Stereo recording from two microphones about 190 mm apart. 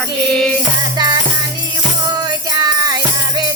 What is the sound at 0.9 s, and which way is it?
Music, 20° right (ahead or behind).